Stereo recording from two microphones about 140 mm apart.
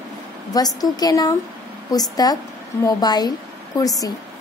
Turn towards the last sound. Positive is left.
turn(degrees=25)  # may be behind; listen again after turning